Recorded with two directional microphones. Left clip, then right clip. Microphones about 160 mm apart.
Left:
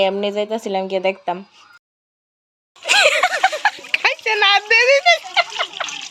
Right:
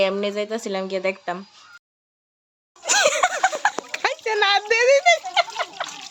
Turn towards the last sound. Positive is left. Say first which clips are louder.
# left 3 dB
turn(degrees=-10)  # may be behind; listen again after turning